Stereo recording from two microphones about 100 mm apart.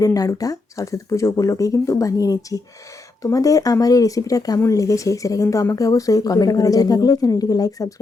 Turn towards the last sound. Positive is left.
turn(degrees=35)  # may be behind; listen again after turning